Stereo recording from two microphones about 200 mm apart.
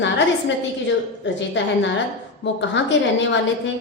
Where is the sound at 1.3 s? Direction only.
65° left (ahead or behind).